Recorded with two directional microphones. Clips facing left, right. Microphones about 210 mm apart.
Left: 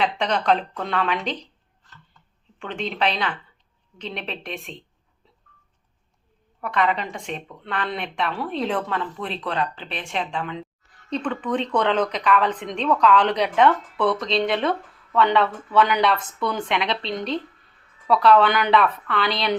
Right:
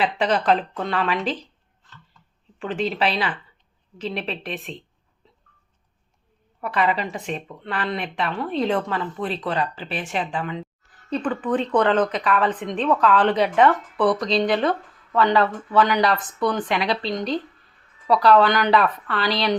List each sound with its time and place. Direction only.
0.0 s speech: 5° right (ahead or behind)
2.6 s speech: 5° right (ahead or behind)
6.6 s speech: 5° right (ahead or behind)